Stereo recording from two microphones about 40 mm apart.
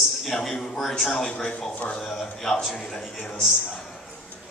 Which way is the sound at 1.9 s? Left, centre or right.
Centre.